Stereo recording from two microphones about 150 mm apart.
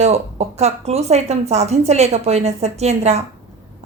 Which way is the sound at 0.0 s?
45° right (ahead or behind).